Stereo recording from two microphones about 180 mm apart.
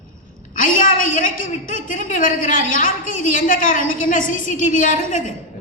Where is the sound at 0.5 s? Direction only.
45° left (ahead or behind).